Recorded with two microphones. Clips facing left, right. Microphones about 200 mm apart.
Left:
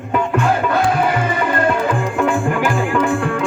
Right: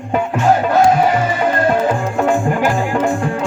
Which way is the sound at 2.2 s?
40° right (ahead or behind).